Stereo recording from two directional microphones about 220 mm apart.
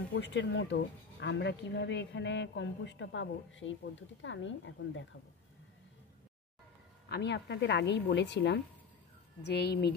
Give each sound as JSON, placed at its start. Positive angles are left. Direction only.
{"t": 0.1, "sound": "speech", "side_deg": 55}
{"t": 7.1, "sound": "speech", "side_deg": 50}